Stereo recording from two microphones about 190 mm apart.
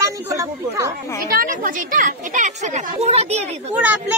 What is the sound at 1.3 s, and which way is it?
A woman's voice, 45° right (ahead or behind).